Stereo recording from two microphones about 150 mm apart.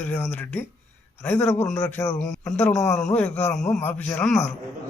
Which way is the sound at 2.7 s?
25° left (ahead or behind).